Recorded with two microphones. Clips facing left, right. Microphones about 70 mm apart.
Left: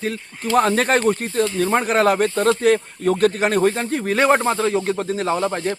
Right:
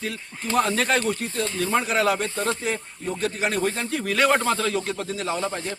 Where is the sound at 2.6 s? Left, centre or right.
Left.